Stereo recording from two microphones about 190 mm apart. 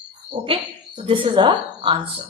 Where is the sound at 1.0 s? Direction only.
25° right (ahead or behind).